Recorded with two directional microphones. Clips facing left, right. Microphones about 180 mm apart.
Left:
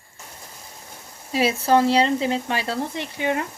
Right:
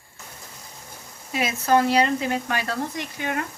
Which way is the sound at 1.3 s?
30° left (ahead or behind).